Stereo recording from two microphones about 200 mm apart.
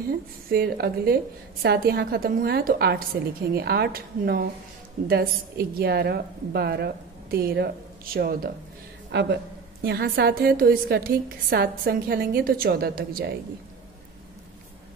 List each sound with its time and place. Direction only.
0.5 s a woman's voice: 50° right (ahead or behind)
9.1 s a man's voice: 60° right (ahead or behind)